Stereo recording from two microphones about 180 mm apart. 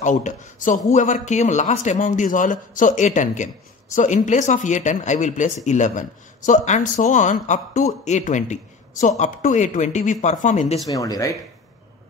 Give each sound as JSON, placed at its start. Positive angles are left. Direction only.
{"t": 0.0, "sound": "a man's voice", "side_deg": 45}
{"t": 10.9, "sound": "speech", "side_deg": 20}